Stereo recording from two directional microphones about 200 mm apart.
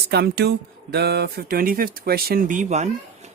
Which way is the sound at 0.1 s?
55° right (ahead or behind).